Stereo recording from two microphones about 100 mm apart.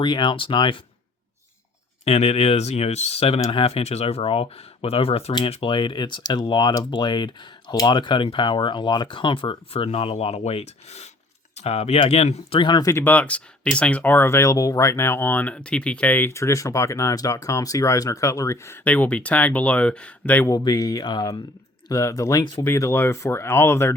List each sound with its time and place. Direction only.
0.0 s speech: 50° left (ahead or behind)
2.0 s speech: 90° left
5.5 s speech: 65° left (ahead or behind); by 12.6 s 80° left
12.6 s speech: 45° left (ahead or behind)
12.9 s speech: 25° left (ahead or behind)
13.1 s speech: 15° left (ahead or behind)
16.3 s speech: 30° left (ahead or behind)
18.9 s speech: 15° left (ahead or behind)
20.5 s speech: 35° left (ahead or behind)
21.8 s speech: 35° left (ahead or behind)